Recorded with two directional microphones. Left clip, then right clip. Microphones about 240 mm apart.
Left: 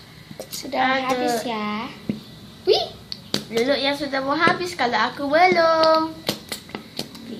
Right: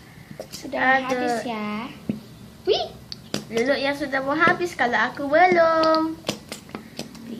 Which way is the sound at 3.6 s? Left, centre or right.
Centre.